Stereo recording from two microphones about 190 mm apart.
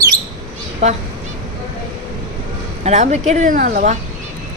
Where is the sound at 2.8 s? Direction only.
35° right (ahead or behind).